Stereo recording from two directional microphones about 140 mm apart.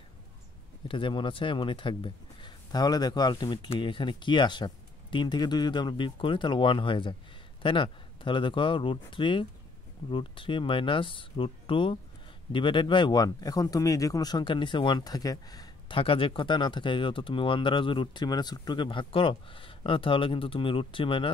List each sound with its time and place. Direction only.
0.8 s speech: 35° left (ahead or behind)
16.0 s speech: 40° left (ahead or behind)